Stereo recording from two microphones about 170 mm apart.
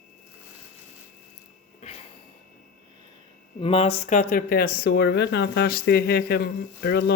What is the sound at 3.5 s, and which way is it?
Speech, 35° left (ahead or behind).